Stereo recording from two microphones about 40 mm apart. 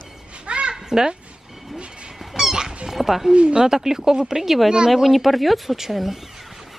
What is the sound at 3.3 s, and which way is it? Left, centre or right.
Speech, right.